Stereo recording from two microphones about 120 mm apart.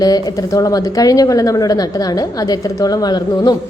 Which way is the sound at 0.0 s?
35° left (ahead or behind).